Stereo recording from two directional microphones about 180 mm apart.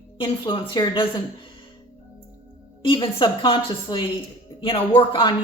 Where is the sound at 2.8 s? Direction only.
30° left (ahead or behind).